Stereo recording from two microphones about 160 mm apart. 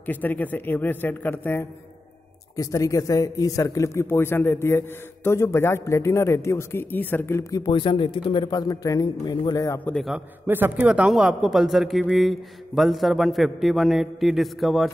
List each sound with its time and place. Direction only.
0.0 s a man's voice: 10° left (ahead or behind)
9.9 s a man's voice: centre (ahead or behind)
10.4 s a man's voice: 10° right (ahead or behind)